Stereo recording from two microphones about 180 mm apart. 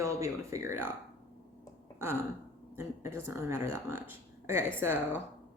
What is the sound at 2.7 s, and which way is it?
Speech, 15° right (ahead or behind).